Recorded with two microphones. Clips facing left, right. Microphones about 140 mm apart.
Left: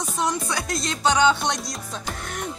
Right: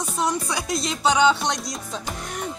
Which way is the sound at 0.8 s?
5° right (ahead or behind).